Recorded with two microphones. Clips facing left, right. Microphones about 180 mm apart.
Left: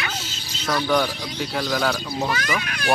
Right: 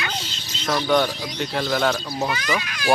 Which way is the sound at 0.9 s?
10° right (ahead or behind).